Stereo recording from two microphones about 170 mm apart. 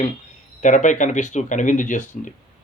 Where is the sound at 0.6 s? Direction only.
45° left (ahead or behind).